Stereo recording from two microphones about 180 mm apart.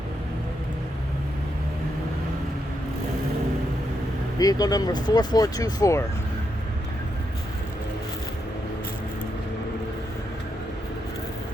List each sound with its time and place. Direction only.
4.4 s speech: 20° left (ahead or behind)